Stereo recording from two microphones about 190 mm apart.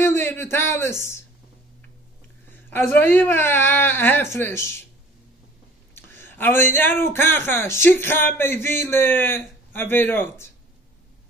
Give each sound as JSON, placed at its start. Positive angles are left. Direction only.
{"t": 0.0, "sound": "a man's voice", "side_deg": 10}
{"t": 2.7, "sound": "speech", "side_deg": 10}
{"t": 5.9, "sound": "speech", "side_deg": 10}